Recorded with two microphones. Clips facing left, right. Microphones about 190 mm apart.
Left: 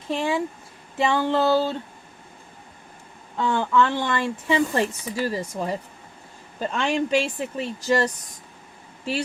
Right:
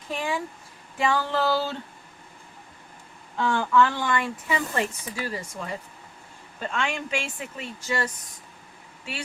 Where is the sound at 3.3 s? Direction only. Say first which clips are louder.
Left 1 dB; 20° left (ahead or behind); by 8.1 s 40° left (ahead or behind).